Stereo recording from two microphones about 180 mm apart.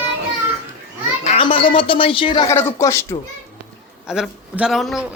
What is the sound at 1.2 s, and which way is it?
A woman's voice, 35° left (ahead or behind).